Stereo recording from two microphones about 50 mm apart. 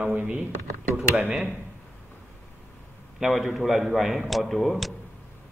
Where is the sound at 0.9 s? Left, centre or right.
Right.